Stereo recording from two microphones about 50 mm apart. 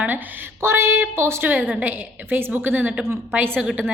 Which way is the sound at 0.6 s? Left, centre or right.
Right.